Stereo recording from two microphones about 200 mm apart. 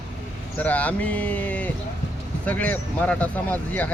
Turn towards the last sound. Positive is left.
turn(degrees=5)  # may be behind; listen again after turning